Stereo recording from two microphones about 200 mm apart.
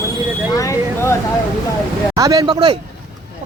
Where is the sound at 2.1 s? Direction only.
20° right (ahead or behind).